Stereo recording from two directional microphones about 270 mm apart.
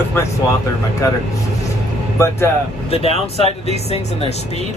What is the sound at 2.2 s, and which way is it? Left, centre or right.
Speech, centre.